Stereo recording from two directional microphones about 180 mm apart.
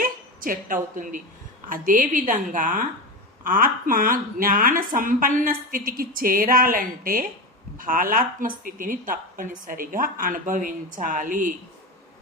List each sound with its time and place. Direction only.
0.0 s a woman's voice: 50° right (ahead or behind)